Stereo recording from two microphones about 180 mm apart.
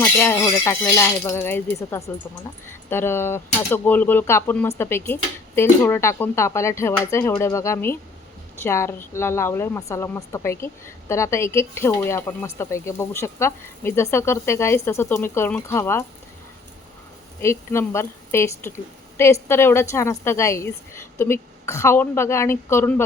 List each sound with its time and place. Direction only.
0.0 s a woman's voice: 15° left (ahead or behind)
17.4 s a woman's voice: 15° left (ahead or behind)